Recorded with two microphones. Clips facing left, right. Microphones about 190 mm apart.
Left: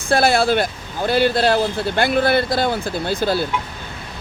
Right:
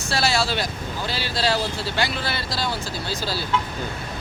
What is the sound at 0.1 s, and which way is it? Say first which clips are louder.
Speech: left 8 dB; 55° left (ahead or behind).